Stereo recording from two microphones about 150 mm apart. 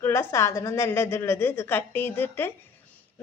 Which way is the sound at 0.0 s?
15° left (ahead or behind).